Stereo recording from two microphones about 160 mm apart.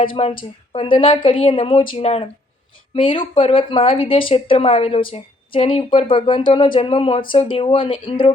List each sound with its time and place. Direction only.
0.0 s speech: 35° left (ahead or behind)